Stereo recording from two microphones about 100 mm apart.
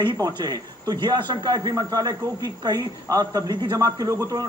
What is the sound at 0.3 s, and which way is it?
A man's voice, 40° right (ahead or behind).